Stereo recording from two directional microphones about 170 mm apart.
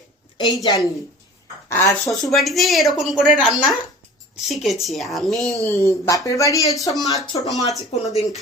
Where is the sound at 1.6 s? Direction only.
15° left (ahead or behind).